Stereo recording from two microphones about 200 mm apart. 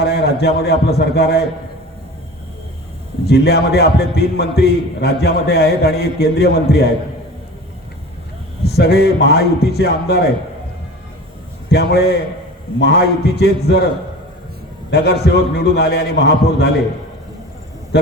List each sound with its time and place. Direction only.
0.0 s a man's voice: 55° left (ahead or behind)
3.2 s a man's voice: 55° left (ahead or behind)
8.6 s a man's voice: 55° left (ahead or behind)
11.7 s a man's voice: 55° left (ahead or behind)
14.8 s a man's voice: 55° left (ahead or behind)